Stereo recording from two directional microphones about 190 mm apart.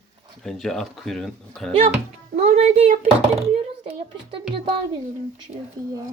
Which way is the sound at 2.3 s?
35° right (ahead or behind).